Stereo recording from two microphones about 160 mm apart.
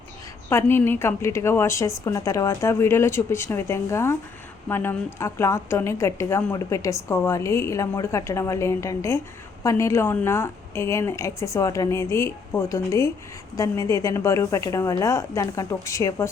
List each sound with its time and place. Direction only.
0.5 s a woman's voice: 15° left (ahead or behind)